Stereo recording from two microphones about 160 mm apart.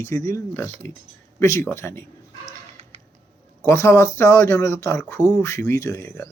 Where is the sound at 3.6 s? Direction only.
15° left (ahead or behind).